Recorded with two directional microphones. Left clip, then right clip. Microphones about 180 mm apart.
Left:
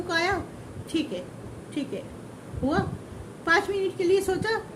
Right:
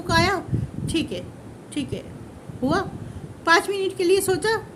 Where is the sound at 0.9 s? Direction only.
55° right (ahead or behind).